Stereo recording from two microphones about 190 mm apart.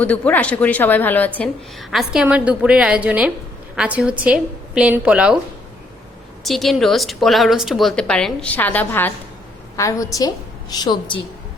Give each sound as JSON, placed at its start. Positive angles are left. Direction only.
{"t": 0.0, "sound": "a woman's voice", "side_deg": 5}
{"t": 6.4, "sound": "a woman's voice", "side_deg": 0}